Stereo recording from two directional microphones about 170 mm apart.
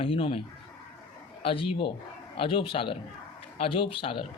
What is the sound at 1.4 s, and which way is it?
Speech, 30° left (ahead or behind).